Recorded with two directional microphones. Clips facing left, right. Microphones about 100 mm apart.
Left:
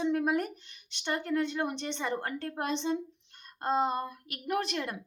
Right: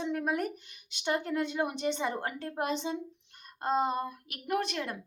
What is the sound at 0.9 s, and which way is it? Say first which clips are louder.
A woman's voice: even; 10° right (ahead or behind).